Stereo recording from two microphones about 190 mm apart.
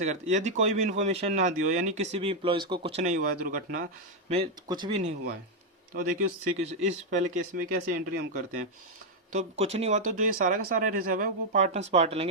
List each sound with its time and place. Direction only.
0.0 s speech: 40° right (ahead or behind)
4.3 s speech: 25° right (ahead or behind)
5.9 s speech: 45° right (ahead or behind)
9.3 s speech: 35° right (ahead or behind)